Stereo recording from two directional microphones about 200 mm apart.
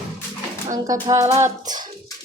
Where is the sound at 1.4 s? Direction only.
20° right (ahead or behind).